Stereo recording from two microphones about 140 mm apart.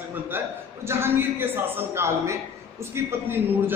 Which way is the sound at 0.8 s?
15° right (ahead or behind).